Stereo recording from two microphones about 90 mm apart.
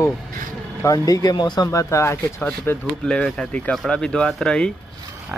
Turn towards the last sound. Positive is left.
turn(degrees=10)  # may be behind; listen again after turning